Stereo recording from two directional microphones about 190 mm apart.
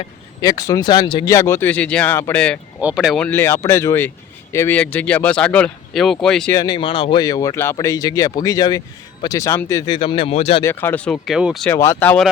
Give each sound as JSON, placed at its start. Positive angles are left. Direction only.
{"t": 0.0, "sound": "speech", "side_deg": 20}
{"t": 6.5, "sound": "speech", "side_deg": 20}
{"t": 10.6, "sound": "speech", "side_deg": 10}
{"t": 11.7, "sound": "speech", "side_deg": 15}